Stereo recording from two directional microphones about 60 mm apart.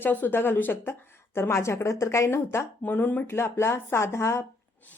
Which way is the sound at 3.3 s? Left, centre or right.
Left.